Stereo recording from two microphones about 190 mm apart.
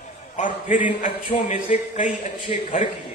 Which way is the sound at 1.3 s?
25° left (ahead or behind).